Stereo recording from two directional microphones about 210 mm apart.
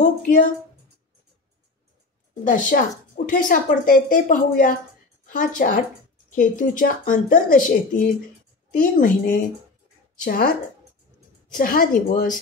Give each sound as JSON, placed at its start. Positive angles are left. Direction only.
{"t": 0.0, "sound": "a woman's voice", "side_deg": 40}
{"t": 2.4, "sound": "a woman's voice", "side_deg": 40}